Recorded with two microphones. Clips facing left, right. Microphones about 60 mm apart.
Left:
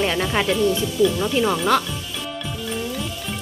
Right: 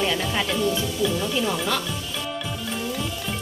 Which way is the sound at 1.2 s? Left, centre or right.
Left.